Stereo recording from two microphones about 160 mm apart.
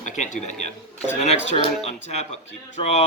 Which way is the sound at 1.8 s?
40° left (ahead or behind).